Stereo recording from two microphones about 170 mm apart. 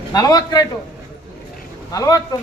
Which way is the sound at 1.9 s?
20° left (ahead or behind).